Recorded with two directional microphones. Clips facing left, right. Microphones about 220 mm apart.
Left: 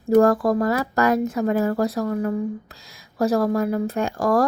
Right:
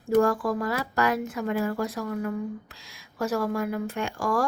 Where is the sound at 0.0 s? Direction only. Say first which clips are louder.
Left 6 dB; 40° left (ahead or behind).